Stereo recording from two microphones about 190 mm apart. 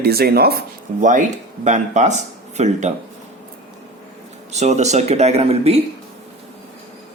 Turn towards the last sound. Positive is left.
turn(degrees=-35)  # may be behind; listen again after turning